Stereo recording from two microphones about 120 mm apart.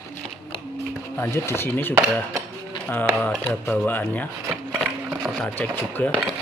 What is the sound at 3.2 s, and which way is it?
A man's voice, 15° left (ahead or behind).